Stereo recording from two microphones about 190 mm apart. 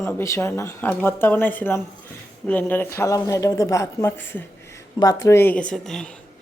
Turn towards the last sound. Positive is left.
turn(degrees=5)  # may be behind; listen again after turning